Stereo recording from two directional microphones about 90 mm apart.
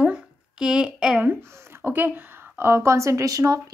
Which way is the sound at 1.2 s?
25° right (ahead or behind).